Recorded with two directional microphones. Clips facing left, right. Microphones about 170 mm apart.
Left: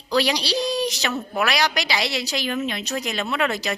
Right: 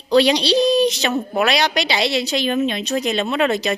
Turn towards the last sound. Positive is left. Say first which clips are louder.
# right 5 dB
turn(degrees=-20)  # may be behind; listen again after turning